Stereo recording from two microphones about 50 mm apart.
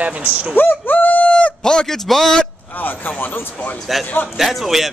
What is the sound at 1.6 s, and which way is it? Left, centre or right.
Speech, centre.